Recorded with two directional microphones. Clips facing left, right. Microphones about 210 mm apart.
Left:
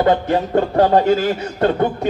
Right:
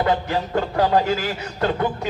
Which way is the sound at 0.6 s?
55° left (ahead or behind).